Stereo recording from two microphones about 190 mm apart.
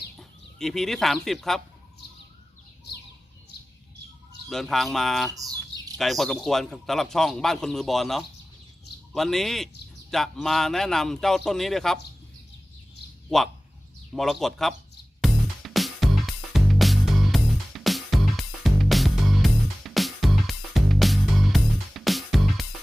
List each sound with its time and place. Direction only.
0.2 s speech: centre (ahead or behind)
4.4 s a man's voice: centre (ahead or behind)
5.3 s bird: 20° right (ahead or behind)
6.0 s a man's voice: centre (ahead or behind)
13.3 s a man's voice: centre (ahead or behind)
15.2 s music: centre (ahead or behind)